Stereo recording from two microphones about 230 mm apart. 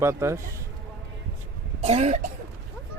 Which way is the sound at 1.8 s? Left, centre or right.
Right.